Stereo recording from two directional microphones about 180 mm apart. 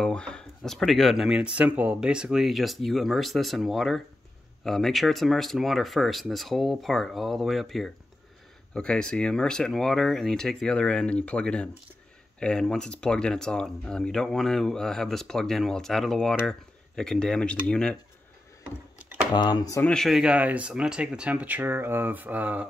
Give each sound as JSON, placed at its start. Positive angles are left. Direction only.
{"t": 0.0, "sound": "speech", "side_deg": 5}
{"t": 18.9, "sound": "computer keyboard", "side_deg": -10}
{"t": 19.3, "sound": "speech", "side_deg": 25}
{"t": 19.9, "sound": "speech", "side_deg": 0}